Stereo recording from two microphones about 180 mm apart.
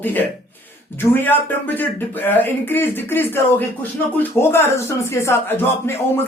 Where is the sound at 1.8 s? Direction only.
10° left (ahead or behind).